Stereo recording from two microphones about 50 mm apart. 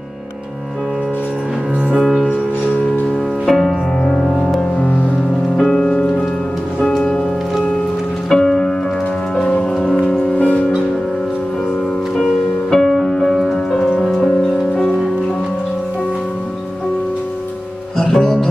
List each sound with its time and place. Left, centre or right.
1.9 s music: centre
3.4 s music: centre
4.6 s music: left
5.6 s music: centre
8.3 s music: centre; by 10.6 s left
12.2 s music: centre
17.9 s music: centre